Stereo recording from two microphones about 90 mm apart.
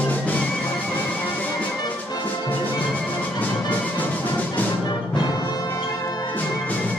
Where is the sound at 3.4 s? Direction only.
20° left (ahead or behind).